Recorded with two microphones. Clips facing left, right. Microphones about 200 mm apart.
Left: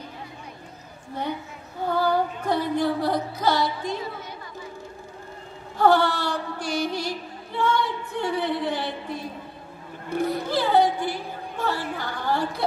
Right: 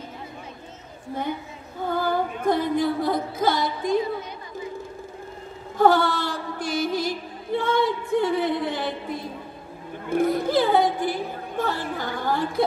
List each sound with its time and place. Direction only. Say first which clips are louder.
1.9 s music: left 1 dB; 50° right (ahead or behind)
5.8 s mantra: right 1 dB; 50° right (ahead or behind)
7.5 s a sound: right 2 dB; 50° right (ahead or behind)
10.0 s music: right 4 dB; 50° right (ahead or behind)